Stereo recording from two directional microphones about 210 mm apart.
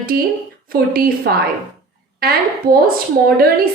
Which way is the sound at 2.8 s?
45° right (ahead or behind).